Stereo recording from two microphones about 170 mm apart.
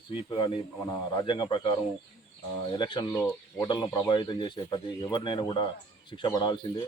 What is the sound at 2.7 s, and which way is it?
Speech, 25° left (ahead or behind).